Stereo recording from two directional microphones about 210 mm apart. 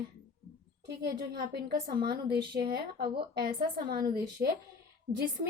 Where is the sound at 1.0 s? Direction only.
50° right (ahead or behind).